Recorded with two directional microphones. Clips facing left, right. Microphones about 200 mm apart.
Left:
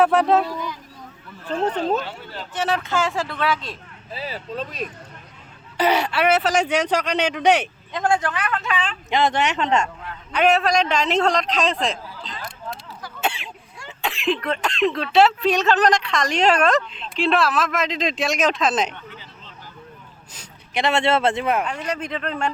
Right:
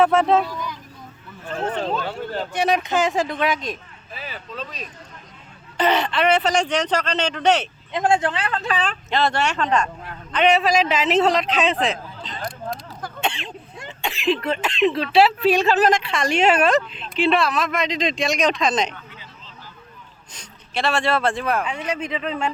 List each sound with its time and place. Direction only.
0.0 s speech: centre (ahead or behind)
1.5 s speech: 40° left (ahead or behind)
2.0 s speech: 50° right (ahead or behind)
2.5 s speech: 15° right (ahead or behind)
4.1 s speech: 30° left (ahead or behind)
4.5 s speech: 50° left (ahead or behind)
5.7 s speech: 10° left (ahead or behind)
7.9 s speech: 25° right (ahead or behind)
9.0 s speech: 15° left (ahead or behind)
10.3 s speech: centre (ahead or behind)
13.2 s throat clearing: 10° left (ahead or behind)
14.0 s speech: centre (ahead or behind)
20.7 s speech: 20° left (ahead or behind)
21.6 s speech: 5° right (ahead or behind)